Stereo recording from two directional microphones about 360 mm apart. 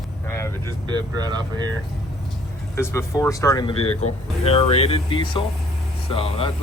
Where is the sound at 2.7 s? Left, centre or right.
Centre.